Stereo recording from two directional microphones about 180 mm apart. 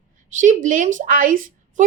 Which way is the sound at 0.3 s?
45° right (ahead or behind).